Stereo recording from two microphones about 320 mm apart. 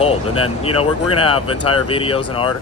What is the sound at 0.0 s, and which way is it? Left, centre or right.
Speech, centre.